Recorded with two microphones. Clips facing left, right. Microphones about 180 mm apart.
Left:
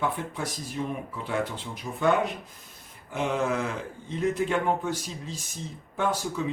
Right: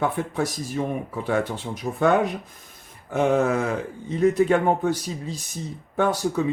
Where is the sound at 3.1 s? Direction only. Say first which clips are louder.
Right 7 dB; 45° right (ahead or behind).